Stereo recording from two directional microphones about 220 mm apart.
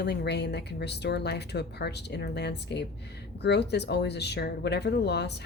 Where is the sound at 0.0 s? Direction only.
50° left (ahead or behind).